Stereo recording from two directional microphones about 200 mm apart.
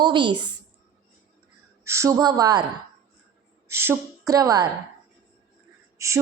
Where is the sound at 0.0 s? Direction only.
25° right (ahead or behind).